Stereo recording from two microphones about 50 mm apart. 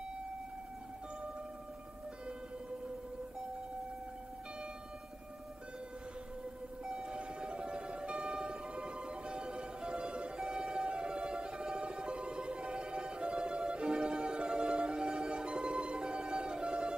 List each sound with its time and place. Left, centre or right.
6.8 s siren: centre